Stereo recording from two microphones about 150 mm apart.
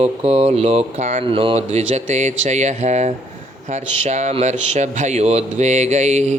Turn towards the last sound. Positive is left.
turn(degrees=-50)  # may be behind; listen again after turning